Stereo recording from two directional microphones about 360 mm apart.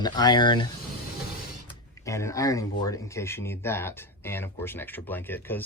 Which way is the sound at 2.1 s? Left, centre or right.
Centre.